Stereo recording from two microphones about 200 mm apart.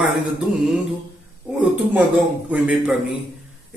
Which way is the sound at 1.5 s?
5° right (ahead or behind).